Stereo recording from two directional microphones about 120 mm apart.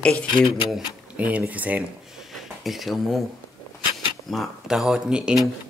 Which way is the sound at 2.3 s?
Centre (ahead or behind).